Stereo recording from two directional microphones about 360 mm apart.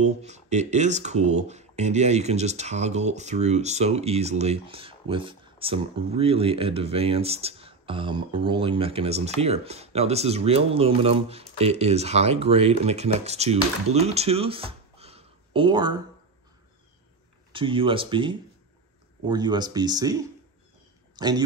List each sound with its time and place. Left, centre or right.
0.0 s speech: centre
17.5 s speech: centre